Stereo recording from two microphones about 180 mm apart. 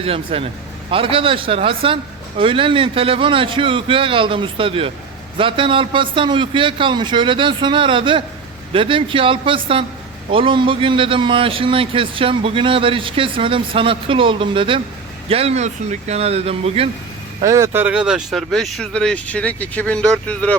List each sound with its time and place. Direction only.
0.0 s a man's voice: 30° right (ahead or behind)
17.4 s speech: 15° right (ahead or behind); by 20.6 s 5° left (ahead or behind)